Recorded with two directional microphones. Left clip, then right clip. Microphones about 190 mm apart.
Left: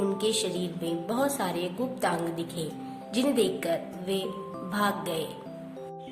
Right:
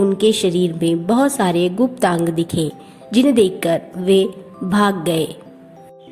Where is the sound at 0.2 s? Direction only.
35° right (ahead or behind).